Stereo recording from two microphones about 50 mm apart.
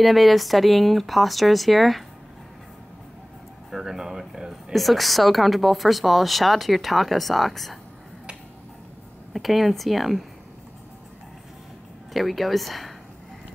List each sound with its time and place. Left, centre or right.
0.0 s speech: centre
3.7 s speech: centre
9.3 s speech: centre
12.1 s speech: centre